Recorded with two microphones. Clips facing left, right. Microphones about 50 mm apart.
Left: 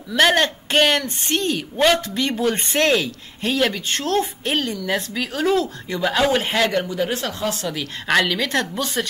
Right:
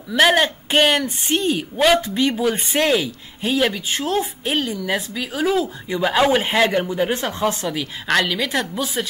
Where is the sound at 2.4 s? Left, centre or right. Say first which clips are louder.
Even; centre.